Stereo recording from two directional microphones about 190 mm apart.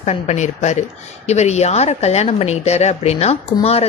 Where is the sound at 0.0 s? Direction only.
35° left (ahead or behind).